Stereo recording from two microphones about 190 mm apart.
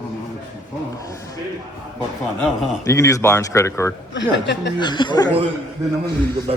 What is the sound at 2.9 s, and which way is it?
A man's voice, 15° left (ahead or behind).